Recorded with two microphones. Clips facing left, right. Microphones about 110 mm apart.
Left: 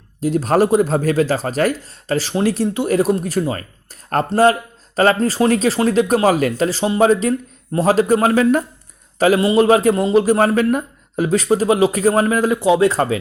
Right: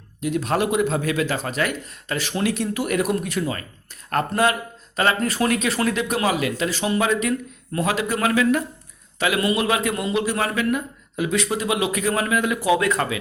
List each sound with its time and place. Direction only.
0.2 s a man's voice: 35° left (ahead or behind)
6.0 s a man's voice: 45° left (ahead or behind)